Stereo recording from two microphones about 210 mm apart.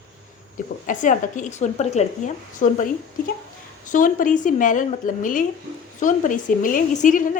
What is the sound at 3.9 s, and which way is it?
Speech, 40° left (ahead or behind).